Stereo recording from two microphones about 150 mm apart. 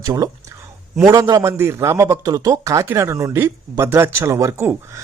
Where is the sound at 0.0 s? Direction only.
25° right (ahead or behind).